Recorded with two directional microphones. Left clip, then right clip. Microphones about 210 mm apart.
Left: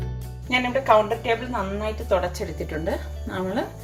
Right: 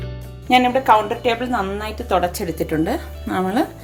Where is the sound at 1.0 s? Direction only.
50° right (ahead or behind).